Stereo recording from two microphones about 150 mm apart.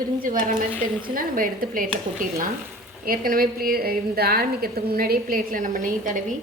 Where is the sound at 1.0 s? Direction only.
70° right (ahead or behind).